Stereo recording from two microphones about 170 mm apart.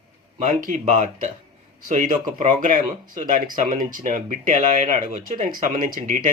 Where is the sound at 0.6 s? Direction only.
45° right (ahead or behind).